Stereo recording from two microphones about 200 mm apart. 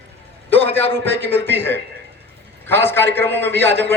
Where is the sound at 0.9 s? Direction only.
10° left (ahead or behind).